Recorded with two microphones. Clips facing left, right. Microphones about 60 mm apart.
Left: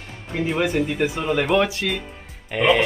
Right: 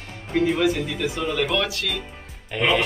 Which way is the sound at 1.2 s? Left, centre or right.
Left.